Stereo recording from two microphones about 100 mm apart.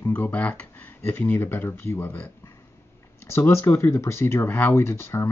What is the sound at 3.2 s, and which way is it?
Speech, 25° left (ahead or behind).